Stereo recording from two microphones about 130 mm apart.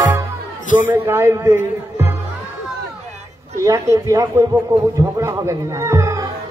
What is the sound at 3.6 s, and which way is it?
A man's voice, 25° right (ahead or behind).